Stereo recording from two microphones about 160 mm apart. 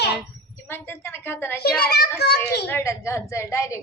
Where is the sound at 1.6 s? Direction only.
75° left (ahead or behind).